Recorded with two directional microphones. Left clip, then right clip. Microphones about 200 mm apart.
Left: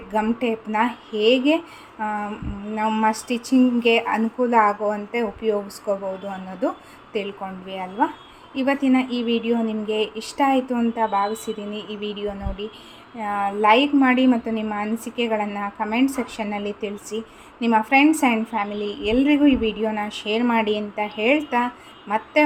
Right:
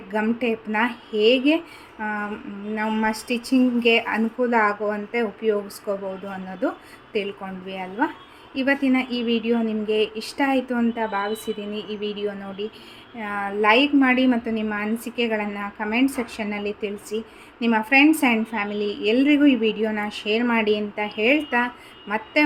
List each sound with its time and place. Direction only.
0.1 s speech: centre (ahead or behind)